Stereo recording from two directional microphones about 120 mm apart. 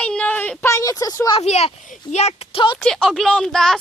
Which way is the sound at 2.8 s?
Centre (ahead or behind).